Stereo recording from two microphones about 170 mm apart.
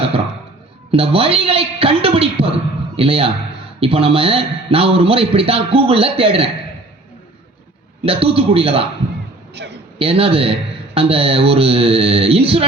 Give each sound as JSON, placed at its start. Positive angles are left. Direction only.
{"t": 0.9, "sound": "a woman's voice", "side_deg": -35}
{"t": 8.0, "sound": "a man's voice", "side_deg": -35}
{"t": 10.0, "sound": "a man's voice", "side_deg": -35}